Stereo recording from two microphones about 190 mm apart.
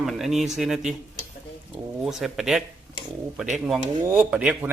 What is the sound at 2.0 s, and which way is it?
Speech, centre (ahead or behind).